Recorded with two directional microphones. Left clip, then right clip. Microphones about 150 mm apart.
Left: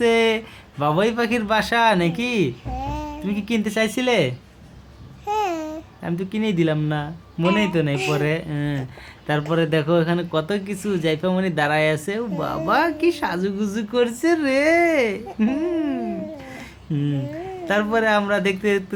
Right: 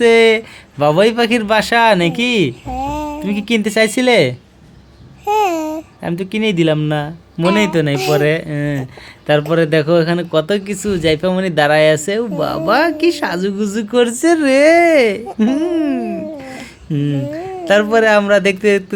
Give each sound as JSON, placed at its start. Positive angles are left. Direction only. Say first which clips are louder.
{"t": 0.0, "sound": "speech", "louder": "right 8 dB", "side_deg": -25}
{"t": 2.7, "sound": "a sound", "louder": "right 8 dB", "side_deg": -45}
{"t": 3.2, "sound": "speech", "louder": "right 6 dB", "side_deg": -25}
{"t": 5.2, "sound": "babbling", "louder": "right 8 dB", "side_deg": -40}
{"t": 6.0, "sound": "speech", "louder": "right 7 dB", "side_deg": -30}
{"t": 8.2, "sound": "speech", "louder": "right 8 dB", "side_deg": -25}